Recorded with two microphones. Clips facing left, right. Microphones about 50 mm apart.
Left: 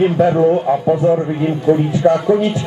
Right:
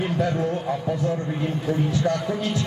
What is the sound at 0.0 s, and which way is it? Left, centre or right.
A man's voice, left.